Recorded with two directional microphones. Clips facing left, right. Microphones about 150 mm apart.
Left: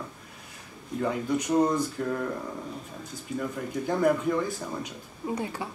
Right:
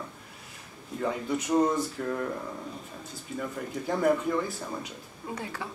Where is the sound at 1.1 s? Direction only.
Centre (ahead or behind).